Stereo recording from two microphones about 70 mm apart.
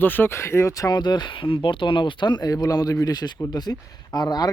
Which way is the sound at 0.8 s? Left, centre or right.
Left.